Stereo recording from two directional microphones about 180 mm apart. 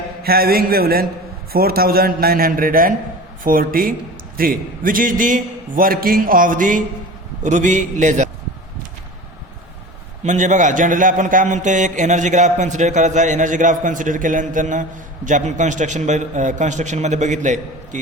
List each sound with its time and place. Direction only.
0.2 s a man's voice: 55° right (ahead or behind)
10.2 s a man's voice: 40° right (ahead or behind)